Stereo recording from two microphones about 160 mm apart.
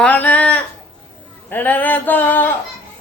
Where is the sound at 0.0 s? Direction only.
10° left (ahead or behind).